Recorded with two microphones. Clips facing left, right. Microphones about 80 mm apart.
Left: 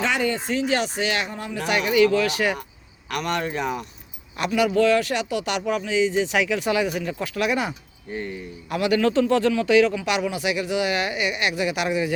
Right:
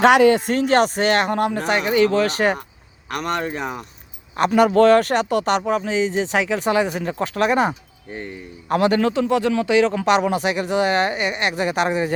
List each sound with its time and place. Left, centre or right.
0.0 s speech: right
1.5 s speech: right
4.4 s speech: right
8.1 s speech: right
8.7 s speech: right
9.9 s speech: right